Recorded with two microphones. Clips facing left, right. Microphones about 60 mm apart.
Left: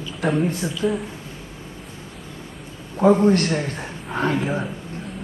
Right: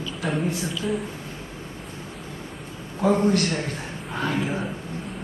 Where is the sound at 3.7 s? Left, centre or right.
Left.